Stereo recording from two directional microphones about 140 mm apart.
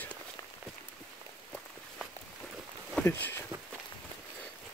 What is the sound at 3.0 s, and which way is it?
Speech, 15° left (ahead or behind).